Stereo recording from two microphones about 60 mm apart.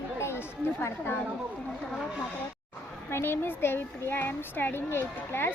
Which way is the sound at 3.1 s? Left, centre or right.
Left.